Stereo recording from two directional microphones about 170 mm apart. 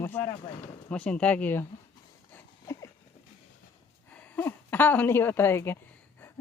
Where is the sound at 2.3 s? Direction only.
15° left (ahead or behind).